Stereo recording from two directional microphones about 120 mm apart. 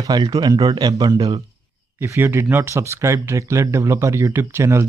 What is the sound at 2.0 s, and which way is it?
Speech, 20° right (ahead or behind).